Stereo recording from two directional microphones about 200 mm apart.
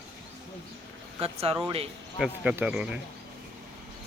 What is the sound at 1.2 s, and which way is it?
Speech, 30° right (ahead or behind).